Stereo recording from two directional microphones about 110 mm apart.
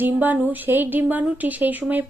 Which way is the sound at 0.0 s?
15° right (ahead or behind).